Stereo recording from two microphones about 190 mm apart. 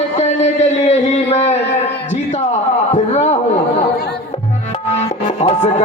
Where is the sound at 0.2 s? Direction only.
35° left (ahead or behind).